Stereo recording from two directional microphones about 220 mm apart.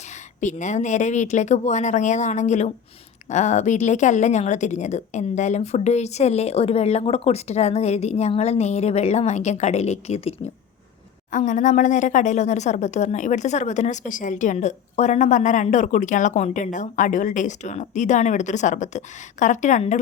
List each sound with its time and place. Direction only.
0.3 s a woman's voice: 35° left (ahead or behind)